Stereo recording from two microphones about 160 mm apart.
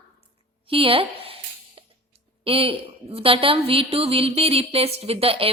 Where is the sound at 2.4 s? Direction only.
35° right (ahead or behind).